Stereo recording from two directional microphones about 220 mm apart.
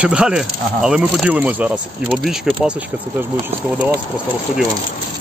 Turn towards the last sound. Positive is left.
turn(degrees=-5)  # may be behind; listen again after turning